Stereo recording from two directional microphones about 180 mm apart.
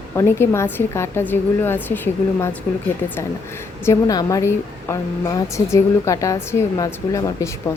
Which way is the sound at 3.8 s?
20° left (ahead or behind).